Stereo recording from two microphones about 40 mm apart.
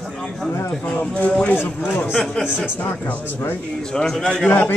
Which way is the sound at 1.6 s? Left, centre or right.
Left.